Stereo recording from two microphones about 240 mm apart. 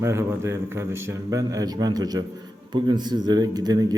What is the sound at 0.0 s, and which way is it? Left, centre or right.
Speech, centre.